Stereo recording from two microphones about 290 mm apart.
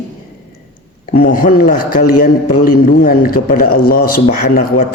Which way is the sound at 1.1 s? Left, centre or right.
Left.